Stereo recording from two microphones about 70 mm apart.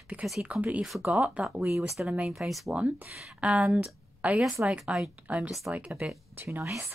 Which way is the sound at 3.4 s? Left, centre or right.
Centre.